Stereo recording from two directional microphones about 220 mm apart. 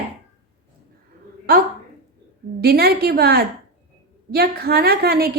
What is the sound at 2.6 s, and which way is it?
A woman's voice, 45° right (ahead or behind).